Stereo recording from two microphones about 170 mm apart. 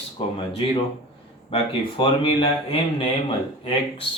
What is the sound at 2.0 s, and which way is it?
Speech, 30° left (ahead or behind).